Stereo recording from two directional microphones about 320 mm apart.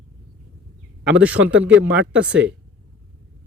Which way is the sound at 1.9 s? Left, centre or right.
Centre.